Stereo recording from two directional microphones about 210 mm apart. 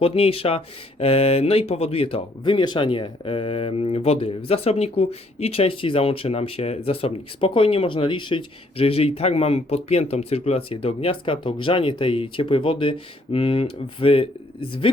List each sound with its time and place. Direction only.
0.0 s speech: 25° left (ahead or behind)